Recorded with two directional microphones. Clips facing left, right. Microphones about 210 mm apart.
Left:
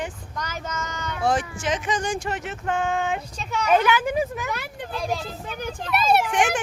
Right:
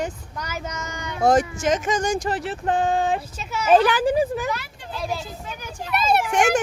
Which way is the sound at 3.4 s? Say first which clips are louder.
Left 1 dB; 5° right (ahead or behind).